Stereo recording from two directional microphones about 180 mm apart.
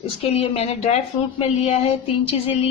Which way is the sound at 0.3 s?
35° left (ahead or behind).